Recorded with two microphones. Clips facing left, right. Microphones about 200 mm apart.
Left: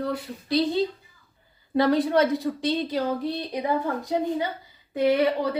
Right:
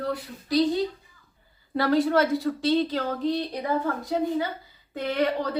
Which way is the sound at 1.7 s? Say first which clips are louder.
Left 1 dB; 20° left (ahead or behind).